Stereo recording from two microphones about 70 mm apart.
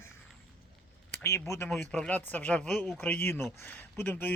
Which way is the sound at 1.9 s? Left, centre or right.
Centre.